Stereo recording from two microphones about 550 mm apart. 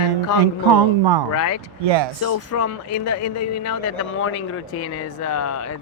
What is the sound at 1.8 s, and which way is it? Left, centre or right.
Speech, right.